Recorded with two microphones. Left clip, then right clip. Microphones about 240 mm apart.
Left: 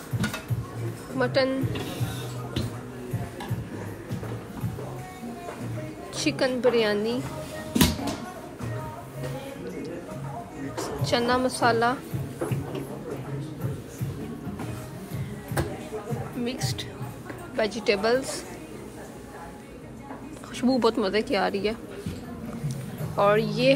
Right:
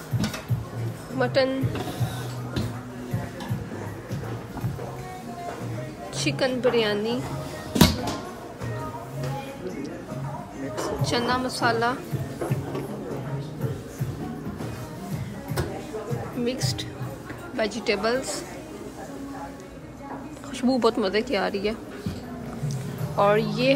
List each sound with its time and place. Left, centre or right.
1.1 s speech: centre
6.2 s speech: centre
11.0 s speech: centre
16.4 s speech: centre
20.6 s speech: centre
22.7 s a sound: centre